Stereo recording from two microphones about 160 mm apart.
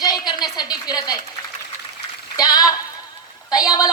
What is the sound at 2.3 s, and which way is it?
A woman's voice, 25° left (ahead or behind).